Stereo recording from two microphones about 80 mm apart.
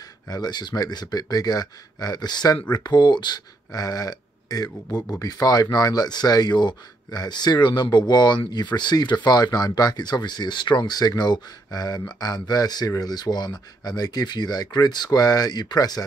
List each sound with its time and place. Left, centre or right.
0.3 s speech: left